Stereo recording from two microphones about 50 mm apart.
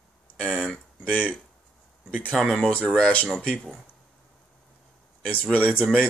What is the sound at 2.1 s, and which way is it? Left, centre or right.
Speech, left.